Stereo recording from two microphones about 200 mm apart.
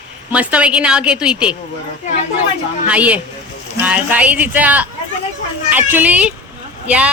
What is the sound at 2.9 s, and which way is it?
Speech, 5° right (ahead or behind).